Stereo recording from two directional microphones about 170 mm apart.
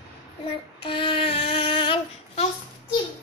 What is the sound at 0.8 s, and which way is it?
Child singing, 30° left (ahead or behind).